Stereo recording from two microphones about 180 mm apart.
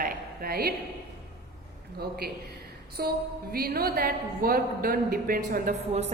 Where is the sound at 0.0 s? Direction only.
55° right (ahead or behind).